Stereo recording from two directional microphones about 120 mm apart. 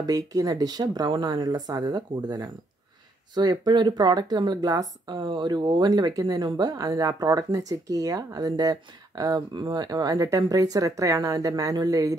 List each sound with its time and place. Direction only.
0.0 s speech: 30° right (ahead or behind)